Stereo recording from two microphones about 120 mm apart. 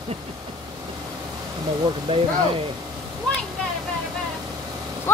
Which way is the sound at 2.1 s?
45° right (ahead or behind).